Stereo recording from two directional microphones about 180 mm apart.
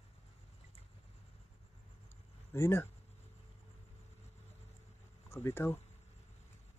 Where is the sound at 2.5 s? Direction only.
15° left (ahead or behind).